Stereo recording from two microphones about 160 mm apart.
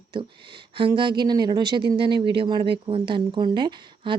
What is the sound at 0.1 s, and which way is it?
Speech, 30° right (ahead or behind).